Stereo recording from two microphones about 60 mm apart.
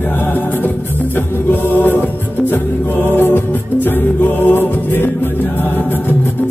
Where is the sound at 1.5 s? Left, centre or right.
Left.